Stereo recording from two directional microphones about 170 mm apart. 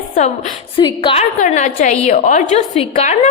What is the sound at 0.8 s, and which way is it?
Speech, 30° left (ahead or behind).